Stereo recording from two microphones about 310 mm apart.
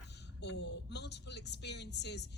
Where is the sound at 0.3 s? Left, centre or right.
Left.